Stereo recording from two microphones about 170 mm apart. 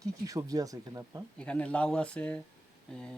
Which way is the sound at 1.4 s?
5° left (ahead or behind).